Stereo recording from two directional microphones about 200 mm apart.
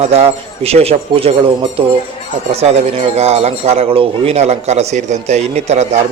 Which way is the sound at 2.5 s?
30° right (ahead or behind).